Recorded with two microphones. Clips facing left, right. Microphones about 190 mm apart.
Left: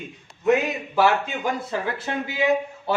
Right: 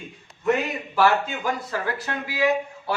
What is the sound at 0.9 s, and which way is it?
A man's voice, 20° left (ahead or behind).